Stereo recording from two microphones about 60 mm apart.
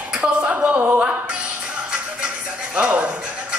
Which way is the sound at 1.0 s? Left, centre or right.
Centre.